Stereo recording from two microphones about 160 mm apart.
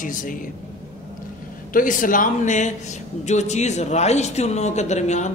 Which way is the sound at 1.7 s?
55° left (ahead or behind).